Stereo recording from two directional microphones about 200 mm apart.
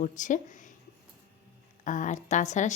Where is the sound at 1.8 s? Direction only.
40° left (ahead or behind).